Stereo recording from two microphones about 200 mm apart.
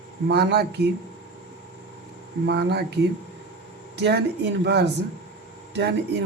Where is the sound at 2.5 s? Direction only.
55° right (ahead or behind).